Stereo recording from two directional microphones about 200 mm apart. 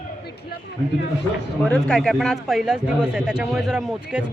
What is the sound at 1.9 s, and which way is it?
Speech, 5° left (ahead or behind).